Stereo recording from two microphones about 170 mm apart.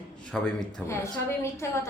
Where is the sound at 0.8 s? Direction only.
15° left (ahead or behind).